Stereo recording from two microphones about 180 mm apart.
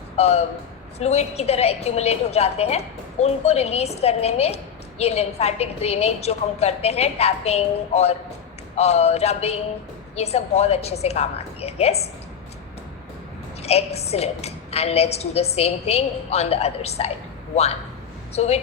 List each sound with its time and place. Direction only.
0.2 s a woman's voice: 35° left (ahead or behind)
13.6 s a woman's voice: 35° left (ahead or behind)